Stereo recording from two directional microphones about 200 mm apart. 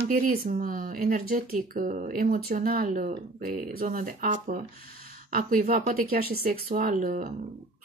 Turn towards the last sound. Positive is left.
turn(degrees=-45)  # may be behind; listen again after turning